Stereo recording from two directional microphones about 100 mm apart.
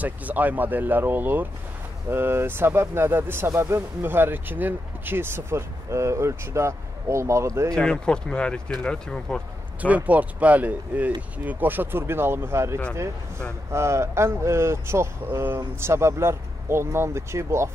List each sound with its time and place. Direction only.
0.0 s speech: 15° right (ahead or behind)
7.7 s speech: 10° left (ahead or behind)
9.8 s speech: 15° right (ahead or behind)